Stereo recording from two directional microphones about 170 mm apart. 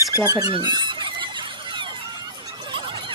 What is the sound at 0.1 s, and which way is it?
Speech, 20° right (ahead or behind).